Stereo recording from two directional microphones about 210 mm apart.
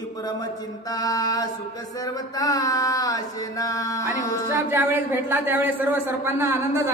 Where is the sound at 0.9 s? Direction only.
15° left (ahead or behind).